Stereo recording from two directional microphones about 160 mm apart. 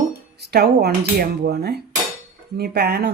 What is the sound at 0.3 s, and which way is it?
Speech, 90° right.